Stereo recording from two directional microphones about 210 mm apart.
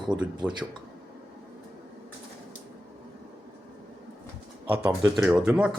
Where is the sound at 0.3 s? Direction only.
20° right (ahead or behind).